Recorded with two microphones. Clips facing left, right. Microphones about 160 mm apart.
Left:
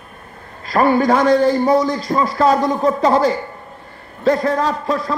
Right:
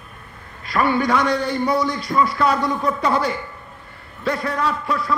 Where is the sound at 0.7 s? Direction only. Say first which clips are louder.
Left 5 dB; 35° left (ahead or behind).